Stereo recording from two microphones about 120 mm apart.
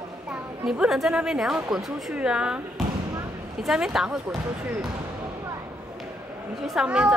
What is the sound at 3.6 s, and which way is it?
Speech, 5° right (ahead or behind).